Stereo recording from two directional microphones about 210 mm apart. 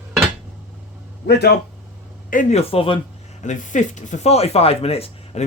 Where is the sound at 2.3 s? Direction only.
35° left (ahead or behind).